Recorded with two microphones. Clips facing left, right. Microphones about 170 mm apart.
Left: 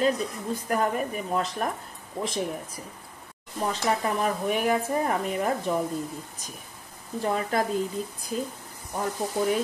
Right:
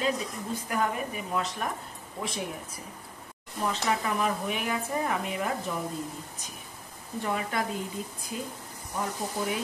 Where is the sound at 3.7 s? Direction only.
40° left (ahead or behind).